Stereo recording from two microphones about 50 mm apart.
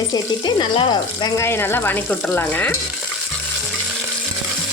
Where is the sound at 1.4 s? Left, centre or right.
Left.